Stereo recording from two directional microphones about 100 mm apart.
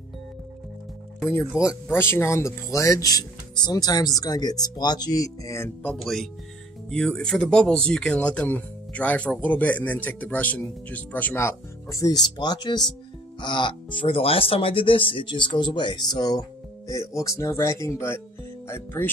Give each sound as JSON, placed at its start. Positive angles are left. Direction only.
{"t": 1.5, "sound": "speech", "side_deg": 30}
{"t": 5.9, "sound": "speech", "side_deg": 0}